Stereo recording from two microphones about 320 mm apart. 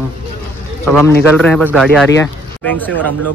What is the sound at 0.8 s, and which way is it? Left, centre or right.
Speech, centre.